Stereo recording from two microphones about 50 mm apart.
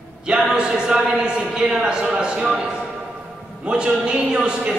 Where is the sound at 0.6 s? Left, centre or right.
Centre.